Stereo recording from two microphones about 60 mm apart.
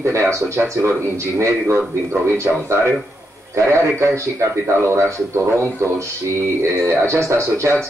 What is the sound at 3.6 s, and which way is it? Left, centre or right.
A man's voice, right.